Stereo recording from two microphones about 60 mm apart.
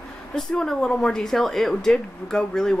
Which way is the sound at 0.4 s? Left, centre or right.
Centre.